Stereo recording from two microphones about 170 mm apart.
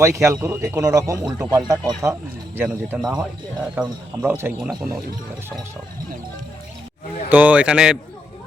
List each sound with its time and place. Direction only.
0.0 s speech: 15° right (ahead or behind)
7.3 s speech: 10° right (ahead or behind)